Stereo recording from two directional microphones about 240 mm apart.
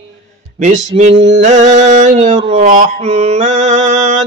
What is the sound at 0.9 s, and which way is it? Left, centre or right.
Mantra, right.